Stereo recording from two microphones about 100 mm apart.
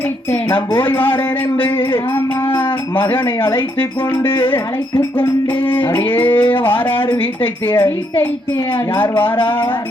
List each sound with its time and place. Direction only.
0.8 s speech: 20° left (ahead or behind)
2.6 s a sound: 20° left (ahead or behind)
3.5 s speech: 20° left (ahead or behind)
9.0 s speech: 20° left (ahead or behind)